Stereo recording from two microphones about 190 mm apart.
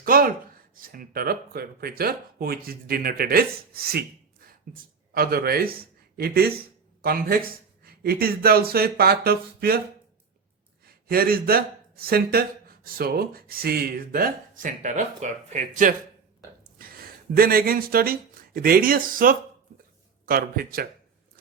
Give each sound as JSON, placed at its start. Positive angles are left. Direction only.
{"t": 0.0, "sound": "a sound", "side_deg": -50}
{"t": 0.8, "sound": "speech", "side_deg": -50}
{"t": 10.8, "sound": "speech", "side_deg": -50}